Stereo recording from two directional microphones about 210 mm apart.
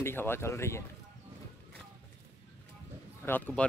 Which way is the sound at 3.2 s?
10° left (ahead or behind).